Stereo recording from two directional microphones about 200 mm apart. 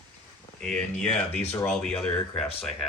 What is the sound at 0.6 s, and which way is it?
Speech, 5° left (ahead or behind).